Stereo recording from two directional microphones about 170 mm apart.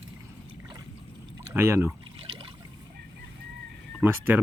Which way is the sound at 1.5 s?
15° right (ahead or behind).